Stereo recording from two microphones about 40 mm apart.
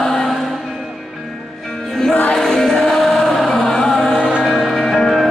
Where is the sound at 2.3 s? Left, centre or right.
Centre.